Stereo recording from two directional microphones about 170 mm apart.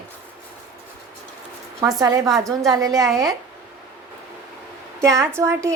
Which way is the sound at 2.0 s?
20° right (ahead or behind).